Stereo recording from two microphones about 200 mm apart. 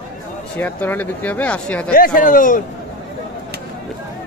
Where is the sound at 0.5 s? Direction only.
10° left (ahead or behind).